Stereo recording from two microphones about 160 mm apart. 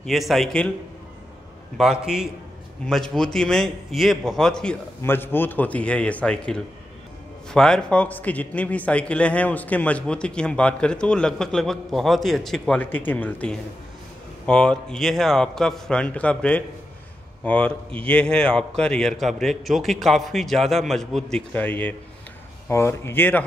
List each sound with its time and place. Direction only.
0.0 s a man's voice: centre (ahead or behind)
1.8 s a man's voice: 5° right (ahead or behind)